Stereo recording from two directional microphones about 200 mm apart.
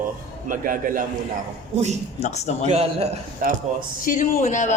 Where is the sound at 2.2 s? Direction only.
35° left (ahead or behind).